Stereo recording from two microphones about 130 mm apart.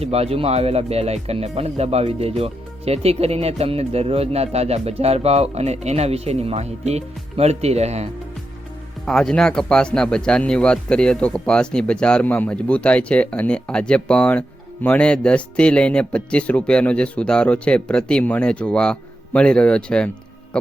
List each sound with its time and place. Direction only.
0.0 s speech: 50° right (ahead or behind)
9.0 s speech: 5° left (ahead or behind)